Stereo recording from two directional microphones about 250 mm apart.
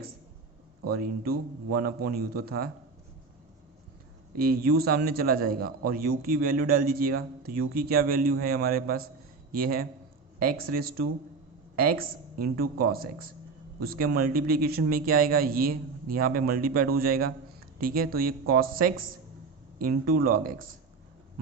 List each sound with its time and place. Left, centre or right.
0.9 s speech: right
4.4 s speech: right